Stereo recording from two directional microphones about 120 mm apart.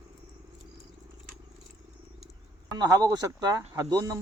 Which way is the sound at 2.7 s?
35° right (ahead or behind).